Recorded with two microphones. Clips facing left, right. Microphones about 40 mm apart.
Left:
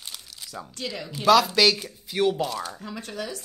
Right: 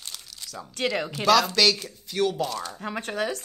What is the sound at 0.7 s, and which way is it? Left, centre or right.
Speech, right.